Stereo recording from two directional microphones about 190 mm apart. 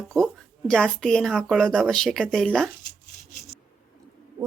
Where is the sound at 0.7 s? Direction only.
5° left (ahead or behind).